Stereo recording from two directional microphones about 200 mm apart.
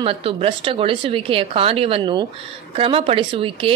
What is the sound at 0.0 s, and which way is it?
A woman's voice, 25° right (ahead or behind).